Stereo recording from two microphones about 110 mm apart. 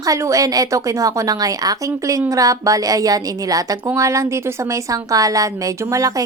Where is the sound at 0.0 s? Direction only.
30° right (ahead or behind).